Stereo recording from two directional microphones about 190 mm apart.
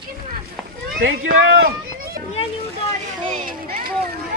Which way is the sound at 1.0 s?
90° right.